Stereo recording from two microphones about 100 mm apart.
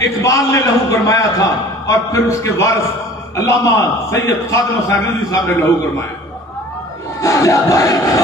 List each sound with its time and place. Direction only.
0.0 s a man's voice: 30° left (ahead or behind)
7.2 s a man's voice: 30° left (ahead or behind)